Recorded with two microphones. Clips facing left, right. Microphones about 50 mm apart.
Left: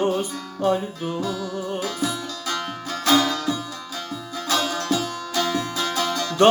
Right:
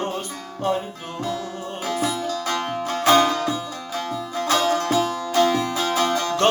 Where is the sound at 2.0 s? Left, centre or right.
Right.